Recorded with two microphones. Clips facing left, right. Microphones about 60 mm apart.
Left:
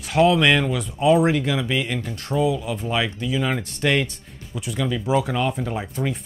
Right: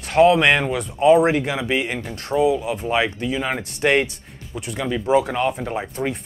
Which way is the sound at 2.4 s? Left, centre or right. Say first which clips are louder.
Right 3 dB; centre.